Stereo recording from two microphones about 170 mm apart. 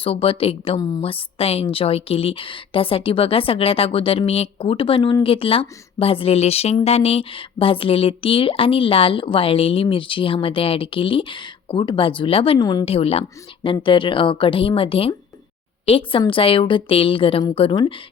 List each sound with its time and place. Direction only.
0.0 s speech: 35° left (ahead or behind)
0.8 s speech: 25° left (ahead or behind)
12.5 s speech: 25° left (ahead or behind)
12.8 s speech: 35° left (ahead or behind)